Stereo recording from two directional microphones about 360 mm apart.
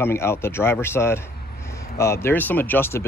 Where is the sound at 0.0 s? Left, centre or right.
Centre.